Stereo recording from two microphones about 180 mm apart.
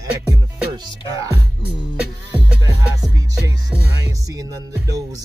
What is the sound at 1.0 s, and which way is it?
Music, 20° right (ahead or behind).